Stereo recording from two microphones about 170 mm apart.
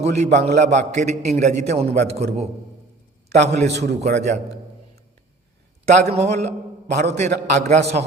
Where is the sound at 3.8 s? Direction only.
40° right (ahead or behind).